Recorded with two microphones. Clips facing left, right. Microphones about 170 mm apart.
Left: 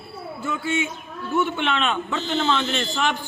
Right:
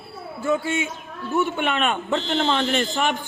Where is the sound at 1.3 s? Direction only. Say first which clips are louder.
Even; 45° right (ahead or behind).